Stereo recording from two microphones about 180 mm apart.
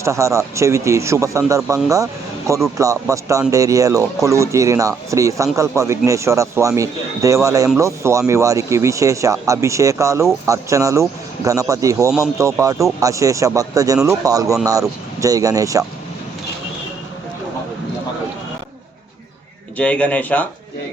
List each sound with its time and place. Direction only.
0.0 s speech: 15° right (ahead or behind)
19.7 s a man's voice: 5° left (ahead or behind)